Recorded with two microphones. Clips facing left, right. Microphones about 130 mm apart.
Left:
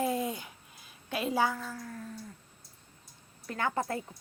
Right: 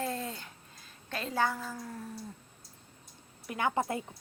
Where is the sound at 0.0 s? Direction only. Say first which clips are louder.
Left 5 dB; 10° left (ahead or behind).